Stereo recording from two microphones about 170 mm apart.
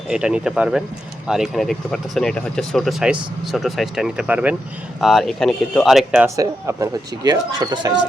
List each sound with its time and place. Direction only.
0.1 s speech: 5° right (ahead or behind)
6.3 s speech: 20° right (ahead or behind)